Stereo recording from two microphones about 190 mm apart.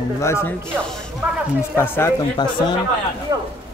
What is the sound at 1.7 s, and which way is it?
Speech, 15° left (ahead or behind).